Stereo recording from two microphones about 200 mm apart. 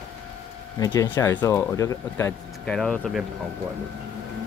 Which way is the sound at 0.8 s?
15° left (ahead or behind).